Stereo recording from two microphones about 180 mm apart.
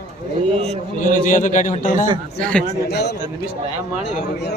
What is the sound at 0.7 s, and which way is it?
A man's voice, 50° left (ahead or behind).